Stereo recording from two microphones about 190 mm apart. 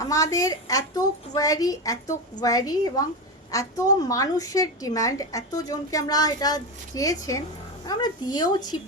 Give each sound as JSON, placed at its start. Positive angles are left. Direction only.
{"t": 0.0, "sound": "a woman's voice", "side_deg": 15}